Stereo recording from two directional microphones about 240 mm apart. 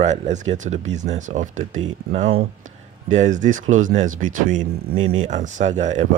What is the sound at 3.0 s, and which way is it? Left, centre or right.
Speech, right.